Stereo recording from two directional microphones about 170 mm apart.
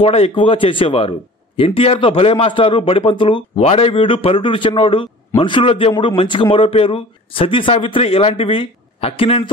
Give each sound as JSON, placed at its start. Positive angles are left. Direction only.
{"t": 0.0, "sound": "a man's voice", "side_deg": 35}